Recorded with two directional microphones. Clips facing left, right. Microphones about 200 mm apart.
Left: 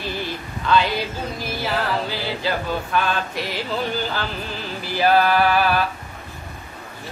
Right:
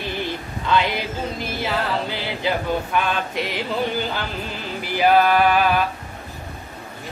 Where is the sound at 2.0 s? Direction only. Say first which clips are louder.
Even; 20° right (ahead or behind).